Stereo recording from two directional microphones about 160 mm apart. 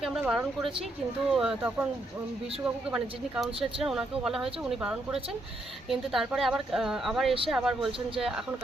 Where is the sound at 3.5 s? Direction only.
35° right (ahead or behind).